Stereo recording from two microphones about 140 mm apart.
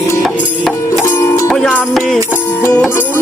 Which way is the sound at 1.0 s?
20° left (ahead or behind).